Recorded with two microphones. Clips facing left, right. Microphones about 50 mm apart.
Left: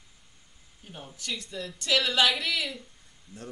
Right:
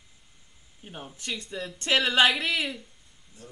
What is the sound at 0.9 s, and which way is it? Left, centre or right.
Speech, right.